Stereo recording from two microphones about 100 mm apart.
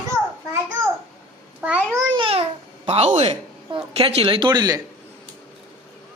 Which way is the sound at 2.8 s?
90° right.